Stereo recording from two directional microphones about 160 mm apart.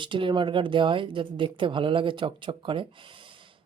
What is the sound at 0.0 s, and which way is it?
A woman's voice, 30° right (ahead or behind).